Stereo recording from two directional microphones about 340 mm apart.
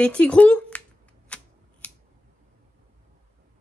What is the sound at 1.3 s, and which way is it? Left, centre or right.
Typewriter, centre.